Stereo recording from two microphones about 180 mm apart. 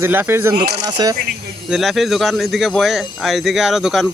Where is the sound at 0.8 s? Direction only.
20° right (ahead or behind).